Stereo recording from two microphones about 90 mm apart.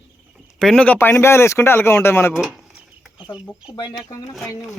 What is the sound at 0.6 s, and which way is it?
Speech, 5° left (ahead or behind).